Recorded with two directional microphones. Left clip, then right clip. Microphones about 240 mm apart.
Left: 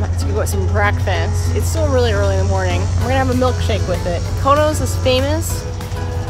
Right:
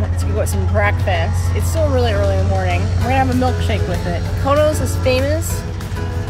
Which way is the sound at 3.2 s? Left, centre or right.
Centre.